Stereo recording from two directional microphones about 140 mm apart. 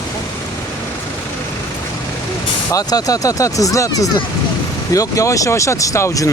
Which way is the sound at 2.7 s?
25° left (ahead or behind).